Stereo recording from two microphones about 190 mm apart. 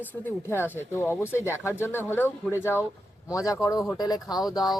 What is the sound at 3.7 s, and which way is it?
Speech, centre (ahead or behind).